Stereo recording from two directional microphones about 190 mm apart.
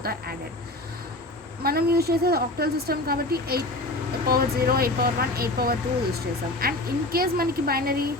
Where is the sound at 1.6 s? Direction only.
55° right (ahead or behind).